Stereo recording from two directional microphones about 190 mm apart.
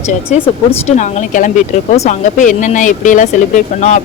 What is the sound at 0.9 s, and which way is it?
A woman's voice, 40° left (ahead or behind).